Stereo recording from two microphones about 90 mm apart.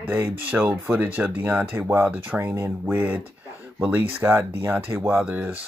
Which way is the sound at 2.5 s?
30° right (ahead or behind).